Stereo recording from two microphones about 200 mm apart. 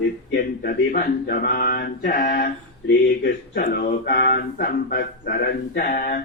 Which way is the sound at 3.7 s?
40° left (ahead or behind).